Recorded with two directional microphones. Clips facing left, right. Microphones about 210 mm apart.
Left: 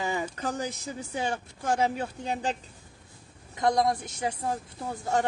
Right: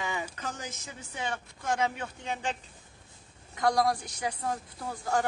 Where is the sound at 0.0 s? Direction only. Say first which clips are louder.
Left 5 dB; 35° left (ahead or behind).